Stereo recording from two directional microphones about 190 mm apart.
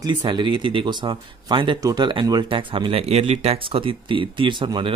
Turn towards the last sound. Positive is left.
turn(degrees=-25)  # may be behind; listen again after turning